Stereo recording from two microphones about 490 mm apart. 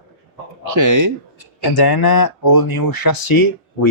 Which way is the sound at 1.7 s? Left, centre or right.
Left.